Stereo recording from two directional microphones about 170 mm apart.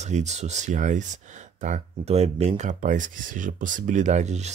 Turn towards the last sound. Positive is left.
turn(degrees=-40)  # may be behind; listen again after turning